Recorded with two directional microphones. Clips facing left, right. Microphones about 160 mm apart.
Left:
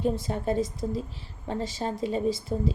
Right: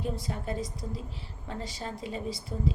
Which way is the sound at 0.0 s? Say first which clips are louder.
Left 7 dB; 25° left (ahead or behind).